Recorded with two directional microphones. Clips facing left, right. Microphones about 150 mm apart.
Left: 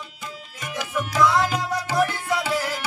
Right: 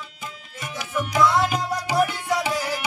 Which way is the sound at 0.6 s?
5° right (ahead or behind).